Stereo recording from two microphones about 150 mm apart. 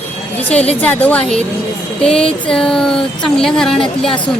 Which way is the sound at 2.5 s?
5° left (ahead or behind).